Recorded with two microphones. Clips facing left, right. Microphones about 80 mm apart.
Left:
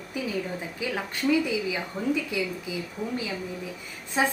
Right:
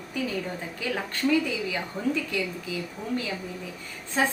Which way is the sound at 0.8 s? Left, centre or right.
Centre.